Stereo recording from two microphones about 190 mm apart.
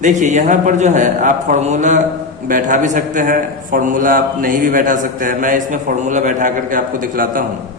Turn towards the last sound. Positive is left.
turn(degrees=-45)  # may be behind; listen again after turning